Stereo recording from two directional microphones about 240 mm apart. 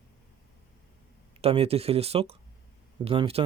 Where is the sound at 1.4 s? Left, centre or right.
Right.